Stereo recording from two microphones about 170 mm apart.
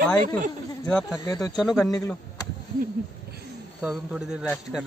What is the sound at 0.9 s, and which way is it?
Speech, 5° left (ahead or behind).